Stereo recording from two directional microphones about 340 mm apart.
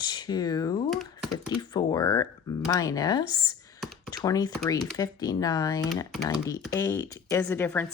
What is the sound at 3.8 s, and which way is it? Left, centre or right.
Computer keyboard, centre.